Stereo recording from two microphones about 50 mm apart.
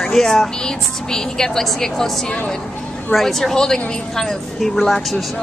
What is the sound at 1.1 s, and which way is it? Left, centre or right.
Speech, centre.